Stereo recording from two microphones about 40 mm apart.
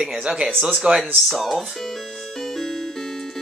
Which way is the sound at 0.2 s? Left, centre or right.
Right.